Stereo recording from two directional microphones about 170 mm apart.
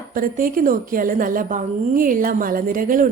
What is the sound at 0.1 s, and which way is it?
A woman's voice, 55° right (ahead or behind).